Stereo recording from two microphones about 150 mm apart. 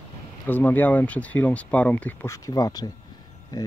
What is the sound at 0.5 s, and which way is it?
Speech, 10° left (ahead or behind).